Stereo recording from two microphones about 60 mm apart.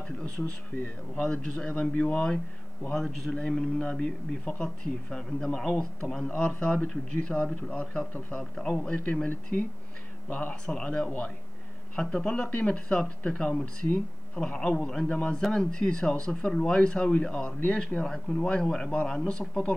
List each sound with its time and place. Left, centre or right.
1.1 s speech: centre
3.0 s a man's voice: centre; by 8.4 s left
8.4 s speech: centre
8.9 s speech: left
12.0 s speech: centre
13.8 s speech: left
14.4 s speech: centre
15.0 s speech: centre